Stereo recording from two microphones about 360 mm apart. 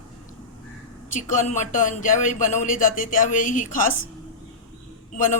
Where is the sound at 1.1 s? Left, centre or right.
Left.